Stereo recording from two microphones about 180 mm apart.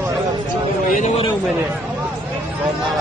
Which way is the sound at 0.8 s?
45° left (ahead or behind).